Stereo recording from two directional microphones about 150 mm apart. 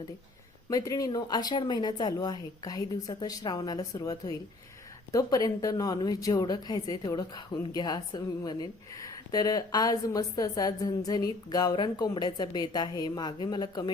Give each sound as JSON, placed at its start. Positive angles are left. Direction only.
{"t": 0.7, "sound": "a woman's voice", "side_deg": 25}